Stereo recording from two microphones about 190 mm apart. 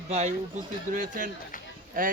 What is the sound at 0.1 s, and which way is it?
Speech, 40° right (ahead or behind).